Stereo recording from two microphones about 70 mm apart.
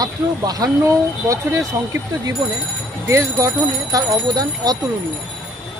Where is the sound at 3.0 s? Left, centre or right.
Right.